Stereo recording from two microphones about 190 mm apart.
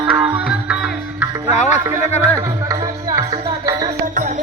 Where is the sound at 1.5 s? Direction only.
35° left (ahead or behind).